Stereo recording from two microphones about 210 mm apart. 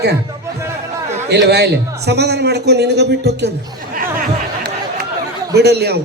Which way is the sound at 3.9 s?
40° right (ahead or behind).